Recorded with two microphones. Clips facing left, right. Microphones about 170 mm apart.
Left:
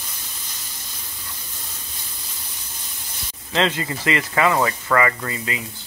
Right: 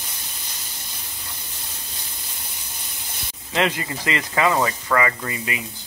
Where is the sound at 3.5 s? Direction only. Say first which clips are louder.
Left 1 dB; 15° right (ahead or behind).